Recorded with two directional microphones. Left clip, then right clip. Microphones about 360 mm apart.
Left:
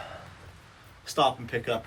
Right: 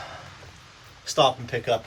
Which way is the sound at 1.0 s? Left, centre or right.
Centre.